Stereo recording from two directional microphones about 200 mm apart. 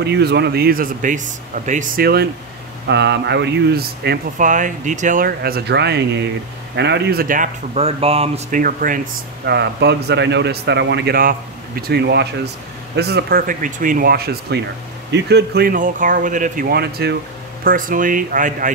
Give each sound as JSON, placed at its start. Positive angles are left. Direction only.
{"t": 0.0, "sound": "a man's voice", "side_deg": -55}
{"t": 4.5, "sound": "speech", "side_deg": -40}
{"t": 7.8, "sound": "speech", "side_deg": -30}
{"t": 8.5, "sound": "speech", "side_deg": -40}
{"t": 9.5, "sound": "a man's voice", "side_deg": -55}